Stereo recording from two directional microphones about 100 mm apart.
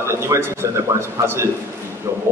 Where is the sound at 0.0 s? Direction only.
25° right (ahead or behind).